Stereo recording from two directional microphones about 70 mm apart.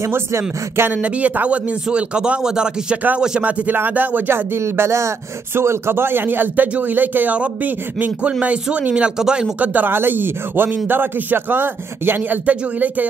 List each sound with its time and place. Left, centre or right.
0.0 s speech: right
0.9 s a man's voice: centre
4.6 s a man's voice: right; by 9.5 s centre
9.6 s a man's voice: right